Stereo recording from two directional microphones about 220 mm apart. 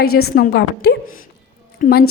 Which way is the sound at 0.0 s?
45° left (ahead or behind).